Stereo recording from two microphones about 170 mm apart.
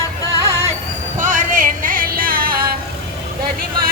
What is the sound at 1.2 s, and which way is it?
Music, 50° right (ahead or behind).